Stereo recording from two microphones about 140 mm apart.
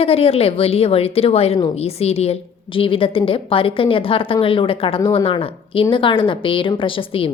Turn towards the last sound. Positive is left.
turn(degrees=40)  # may be behind; listen again after turning